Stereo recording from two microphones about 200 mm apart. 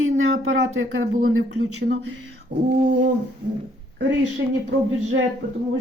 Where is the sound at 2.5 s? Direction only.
55° right (ahead or behind).